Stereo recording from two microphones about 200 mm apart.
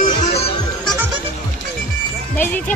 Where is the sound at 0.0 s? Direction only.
35° left (ahead or behind).